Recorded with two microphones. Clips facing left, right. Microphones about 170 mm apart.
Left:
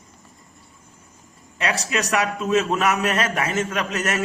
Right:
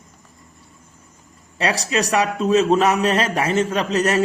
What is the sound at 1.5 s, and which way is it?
A man's voice, 35° right (ahead or behind).